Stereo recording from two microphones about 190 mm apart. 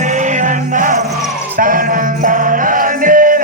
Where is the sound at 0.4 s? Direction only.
45° right (ahead or behind).